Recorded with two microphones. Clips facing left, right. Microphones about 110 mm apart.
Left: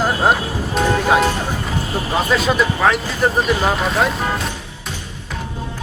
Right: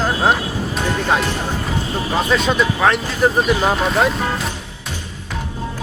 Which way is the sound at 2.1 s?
Centre (ahead or behind).